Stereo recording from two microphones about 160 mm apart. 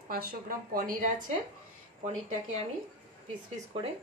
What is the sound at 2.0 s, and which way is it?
Speech, 45° right (ahead or behind).